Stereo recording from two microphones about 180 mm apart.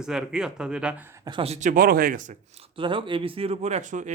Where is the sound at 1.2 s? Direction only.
30° right (ahead or behind).